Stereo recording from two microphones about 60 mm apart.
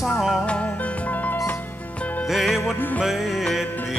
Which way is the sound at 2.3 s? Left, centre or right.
Centre.